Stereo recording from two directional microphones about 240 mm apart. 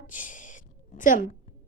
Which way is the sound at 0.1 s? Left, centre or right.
Left.